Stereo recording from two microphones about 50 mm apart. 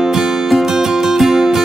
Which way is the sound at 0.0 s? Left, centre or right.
Centre.